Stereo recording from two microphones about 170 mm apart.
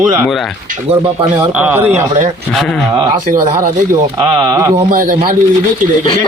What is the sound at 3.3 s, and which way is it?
Speech, 50° right (ahead or behind).